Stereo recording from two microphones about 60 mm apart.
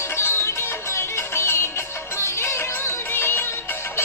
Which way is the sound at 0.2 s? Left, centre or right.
Left.